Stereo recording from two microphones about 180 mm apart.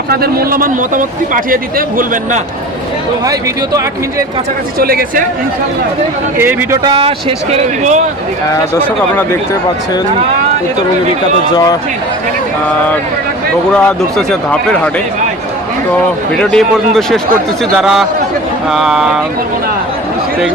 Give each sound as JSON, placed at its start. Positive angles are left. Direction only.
{"t": 0.1, "sound": "a man's voice", "side_deg": -60}
{"t": 3.2, "sound": "speech", "side_deg": -20}
{"t": 4.8, "sound": "speech", "side_deg": -55}
{"t": 6.3, "sound": "speech", "side_deg": -10}
{"t": 6.8, "sound": "speech", "side_deg": -30}
{"t": 13.7, "sound": "a man's voice", "side_deg": 5}
{"t": 16.4, "sound": "a man's voice", "side_deg": 5}
{"t": 17.7, "sound": "a man's voice", "side_deg": -5}